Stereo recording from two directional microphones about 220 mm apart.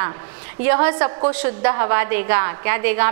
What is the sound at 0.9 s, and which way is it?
Speech, 25° right (ahead or behind).